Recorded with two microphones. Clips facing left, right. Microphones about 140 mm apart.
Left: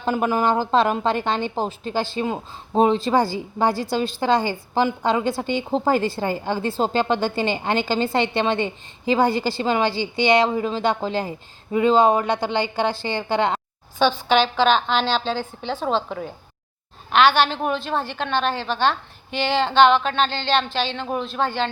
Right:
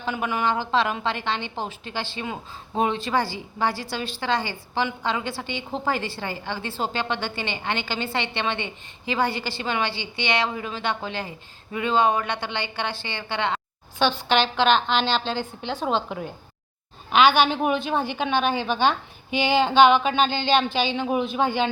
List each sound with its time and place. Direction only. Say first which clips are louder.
0.0 s a woman's voice: left 5 dB; 40° left (ahead or behind)
14.0 s a woman's voice: left 3 dB; 10° left (ahead or behind)